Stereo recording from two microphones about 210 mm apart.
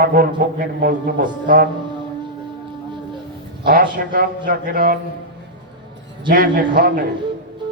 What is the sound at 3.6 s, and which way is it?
A man's voice, 45° right (ahead or behind).